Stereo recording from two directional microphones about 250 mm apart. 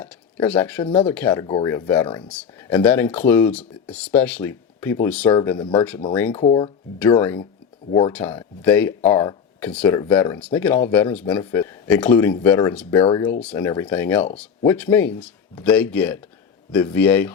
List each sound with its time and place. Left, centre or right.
0.0 s speech: centre
2.4 s speech: centre
7.0 s speech: centre